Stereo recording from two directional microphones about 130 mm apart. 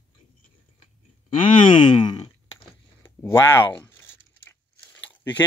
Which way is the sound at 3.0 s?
20° left (ahead or behind).